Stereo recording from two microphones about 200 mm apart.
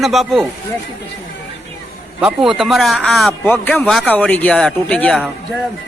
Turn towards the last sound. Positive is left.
turn(degrees=0)  # may be behind; listen again after turning